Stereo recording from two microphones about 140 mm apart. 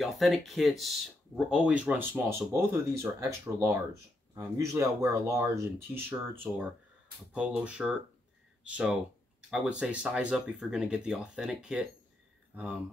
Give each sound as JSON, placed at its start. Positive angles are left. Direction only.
{"t": 0.0, "sound": "speech", "side_deg": 0}
{"t": 7.3, "sound": "speech", "side_deg": -10}